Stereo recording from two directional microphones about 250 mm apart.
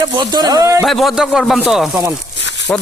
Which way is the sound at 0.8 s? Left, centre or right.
Centre.